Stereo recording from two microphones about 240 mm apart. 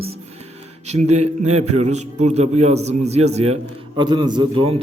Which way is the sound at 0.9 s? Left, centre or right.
Right.